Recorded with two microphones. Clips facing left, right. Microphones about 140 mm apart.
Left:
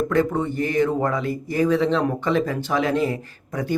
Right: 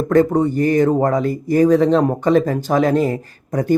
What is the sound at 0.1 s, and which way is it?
Speech, 40° right (ahead or behind).